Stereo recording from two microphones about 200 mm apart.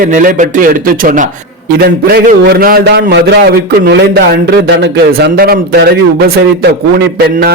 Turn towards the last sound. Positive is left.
turn(degrees=-50)  # may be behind; listen again after turning